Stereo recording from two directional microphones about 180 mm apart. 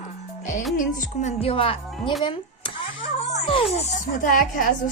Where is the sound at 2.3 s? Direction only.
30° left (ahead or behind).